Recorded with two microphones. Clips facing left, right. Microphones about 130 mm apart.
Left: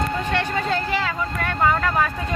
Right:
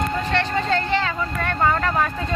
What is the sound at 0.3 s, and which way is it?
Vehicle, 10° left (ahead or behind).